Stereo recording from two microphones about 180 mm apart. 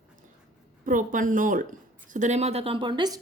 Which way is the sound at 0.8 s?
45° right (ahead or behind).